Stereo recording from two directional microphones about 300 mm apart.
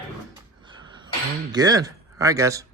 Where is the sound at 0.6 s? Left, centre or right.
Centre.